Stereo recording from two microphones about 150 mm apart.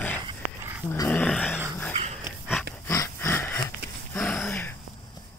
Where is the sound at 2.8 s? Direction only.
20° left (ahead or behind).